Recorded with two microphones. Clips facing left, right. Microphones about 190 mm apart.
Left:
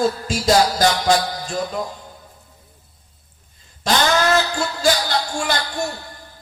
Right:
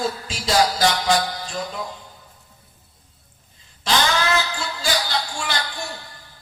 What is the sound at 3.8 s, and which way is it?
Speech, 45° left (ahead or behind).